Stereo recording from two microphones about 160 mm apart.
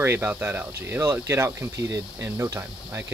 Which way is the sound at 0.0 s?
15° right (ahead or behind).